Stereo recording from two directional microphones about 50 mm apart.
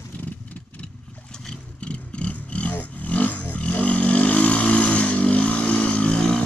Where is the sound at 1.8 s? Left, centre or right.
Left.